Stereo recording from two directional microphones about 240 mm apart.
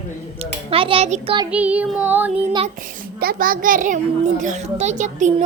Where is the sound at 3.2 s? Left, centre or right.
Right.